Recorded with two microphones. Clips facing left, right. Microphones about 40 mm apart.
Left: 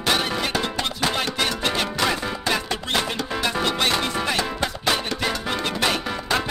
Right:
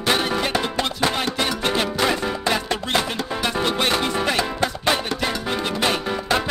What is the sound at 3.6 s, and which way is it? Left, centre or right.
Music, right.